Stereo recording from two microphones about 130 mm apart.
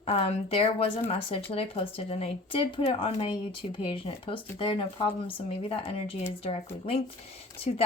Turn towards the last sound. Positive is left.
turn(degrees=50)  # may be behind; listen again after turning